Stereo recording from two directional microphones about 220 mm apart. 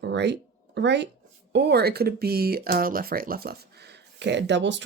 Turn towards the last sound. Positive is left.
turn(degrees=-55)  # may be behind; listen again after turning